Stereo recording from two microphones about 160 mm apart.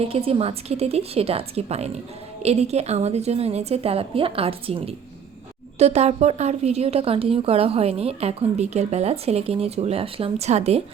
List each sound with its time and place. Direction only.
0.0 s a woman's voice: 40° right (ahead or behind)